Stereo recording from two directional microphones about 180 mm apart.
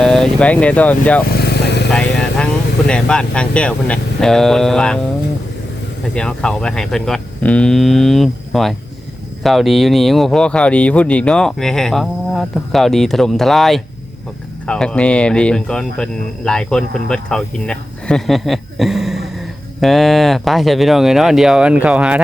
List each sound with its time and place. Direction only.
0.0 s speech: 5° left (ahead or behind)
1.4 s vehicle: 70° left (ahead or behind)
1.9 s speech: 5° left (ahead or behind)
6.1 s speech: 5° left (ahead or behind)